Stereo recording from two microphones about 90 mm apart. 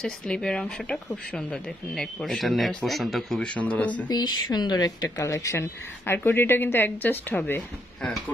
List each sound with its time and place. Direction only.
0.0 s speech: 5° left (ahead or behind)
4.1 s a woman's voice: 50° left (ahead or behind)
5.2 s a woman's voice: 35° left (ahead or behind)